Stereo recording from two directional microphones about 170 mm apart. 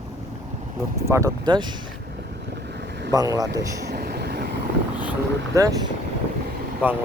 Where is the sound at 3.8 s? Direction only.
65° right (ahead or behind).